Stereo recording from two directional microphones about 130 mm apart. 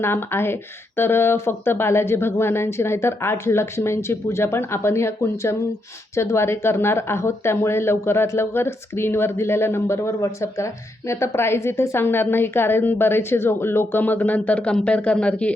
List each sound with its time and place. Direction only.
0.0 s speech: 20° left (ahead or behind)